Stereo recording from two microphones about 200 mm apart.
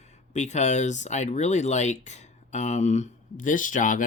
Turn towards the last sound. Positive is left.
turn(degrees=40)  # may be behind; listen again after turning